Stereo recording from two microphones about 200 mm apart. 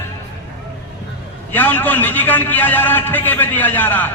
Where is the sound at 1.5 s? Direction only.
10° left (ahead or behind).